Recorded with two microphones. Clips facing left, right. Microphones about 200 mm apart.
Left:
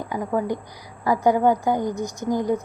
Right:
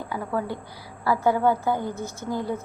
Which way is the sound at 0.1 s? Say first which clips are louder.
Left 5 dB; 15° left (ahead or behind).